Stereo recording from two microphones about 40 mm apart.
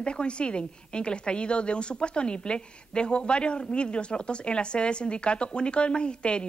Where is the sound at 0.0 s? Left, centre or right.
Left.